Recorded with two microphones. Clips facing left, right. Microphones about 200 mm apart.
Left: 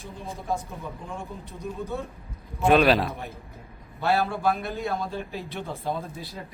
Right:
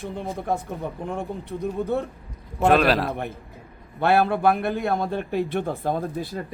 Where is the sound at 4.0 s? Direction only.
60° right (ahead or behind).